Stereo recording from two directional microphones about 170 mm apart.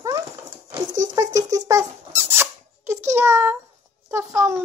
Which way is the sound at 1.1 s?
20° right (ahead or behind).